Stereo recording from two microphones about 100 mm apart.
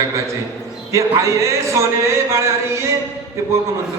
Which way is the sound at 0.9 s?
30° right (ahead or behind).